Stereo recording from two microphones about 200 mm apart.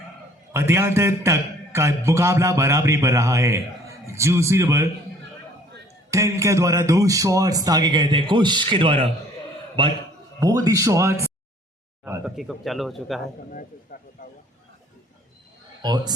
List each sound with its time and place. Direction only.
0.5 s a man's voice: 15° right (ahead or behind)
6.1 s a man's voice: 15° right (ahead or behind)
10.4 s a man's voice: 15° right (ahead or behind)
12.4 s speech: centre (ahead or behind)
13.5 s speech: 45° left (ahead or behind)
15.8 s a man's voice: 20° right (ahead or behind)